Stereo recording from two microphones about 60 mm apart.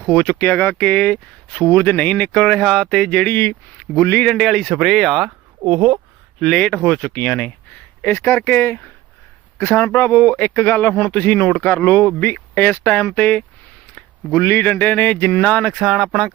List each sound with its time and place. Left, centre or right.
0.1 s speech: left; by 1.6 s centre
1.7 s speech: left
2.5 s speech: centre
3.2 s speech: left
4.4 s speech: centre
5.6 s speech: centre
6.4 s speech: centre
7.2 s speech: left
14.3 s speech: left
14.7 s speech: left
15.6 s speech: centre